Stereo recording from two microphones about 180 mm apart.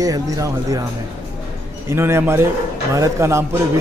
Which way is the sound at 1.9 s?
15° right (ahead or behind).